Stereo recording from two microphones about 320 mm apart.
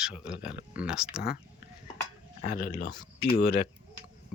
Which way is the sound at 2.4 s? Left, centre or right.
Left.